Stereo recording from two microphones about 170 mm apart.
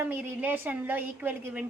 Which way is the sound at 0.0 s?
10° right (ahead or behind).